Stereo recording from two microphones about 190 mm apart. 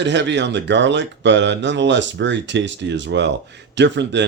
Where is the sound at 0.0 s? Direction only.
65° right (ahead or behind).